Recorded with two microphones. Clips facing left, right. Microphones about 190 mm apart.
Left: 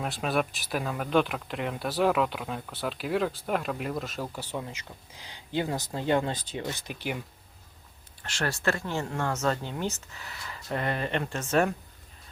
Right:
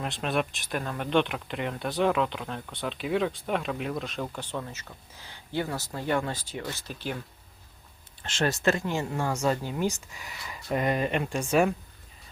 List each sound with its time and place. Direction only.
0.0 s speech: centre (ahead or behind)
8.2 s speech: 20° right (ahead or behind)